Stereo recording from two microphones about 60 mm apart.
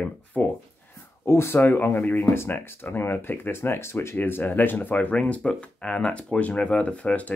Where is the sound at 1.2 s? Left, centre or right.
Left.